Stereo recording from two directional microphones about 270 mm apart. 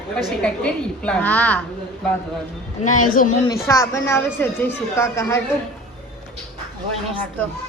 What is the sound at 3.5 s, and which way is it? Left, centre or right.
A woman's voice, centre.